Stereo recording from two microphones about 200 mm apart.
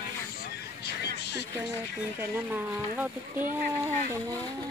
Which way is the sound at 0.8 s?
60° left (ahead or behind).